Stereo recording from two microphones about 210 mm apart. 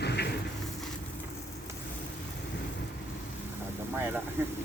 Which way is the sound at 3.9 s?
10° right (ahead or behind).